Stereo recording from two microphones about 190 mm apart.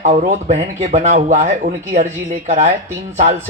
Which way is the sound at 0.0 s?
40° right (ahead or behind).